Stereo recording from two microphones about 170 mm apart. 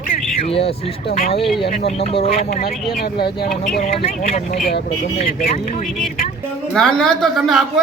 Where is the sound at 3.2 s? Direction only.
65° left (ahead or behind).